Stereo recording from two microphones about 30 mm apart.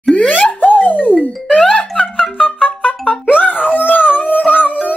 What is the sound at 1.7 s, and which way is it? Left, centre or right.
Music, left.